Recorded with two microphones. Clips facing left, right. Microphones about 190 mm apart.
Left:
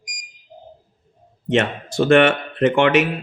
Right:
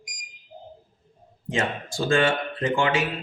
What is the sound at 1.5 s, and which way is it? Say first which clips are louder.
Mantra: left 7 dB; 70° left (ahead or behind).